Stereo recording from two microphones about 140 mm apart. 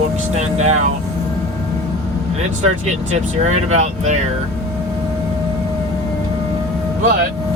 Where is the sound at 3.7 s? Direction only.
55° right (ahead or behind).